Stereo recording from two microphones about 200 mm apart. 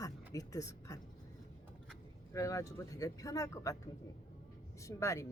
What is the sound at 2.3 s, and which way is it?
Speech, 15° left (ahead or behind).